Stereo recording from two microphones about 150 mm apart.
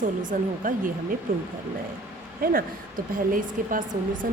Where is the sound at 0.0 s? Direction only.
60° right (ahead or behind).